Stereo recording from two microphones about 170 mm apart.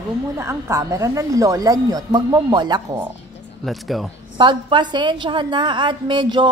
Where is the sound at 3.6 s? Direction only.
Centre (ahead or behind).